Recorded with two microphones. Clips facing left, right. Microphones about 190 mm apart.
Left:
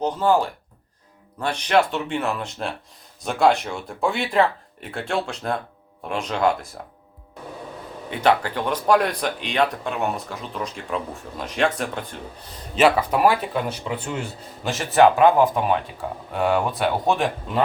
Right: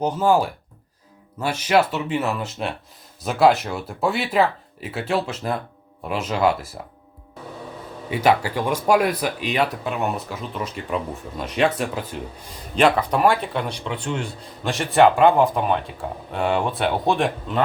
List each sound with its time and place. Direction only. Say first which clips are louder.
0.0 s speech: right 1 dB; 10° right (ahead or behind)
8.1 s speech: right 1 dB; 10° right (ahead or behind)